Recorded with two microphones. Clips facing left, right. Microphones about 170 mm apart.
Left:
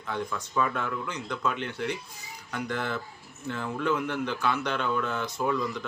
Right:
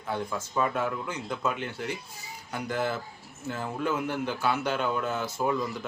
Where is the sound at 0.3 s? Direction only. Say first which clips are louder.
Even; 25° right (ahead or behind).